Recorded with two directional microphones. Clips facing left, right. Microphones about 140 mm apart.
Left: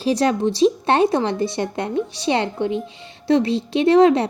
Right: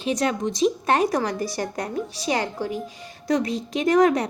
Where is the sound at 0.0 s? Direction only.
30° left (ahead or behind).